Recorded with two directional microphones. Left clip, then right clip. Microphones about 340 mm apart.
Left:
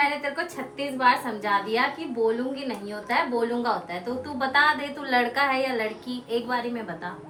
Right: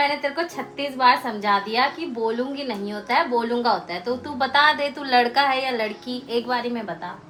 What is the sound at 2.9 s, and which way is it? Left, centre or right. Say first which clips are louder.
A woman's voice: right 4 dB; centre.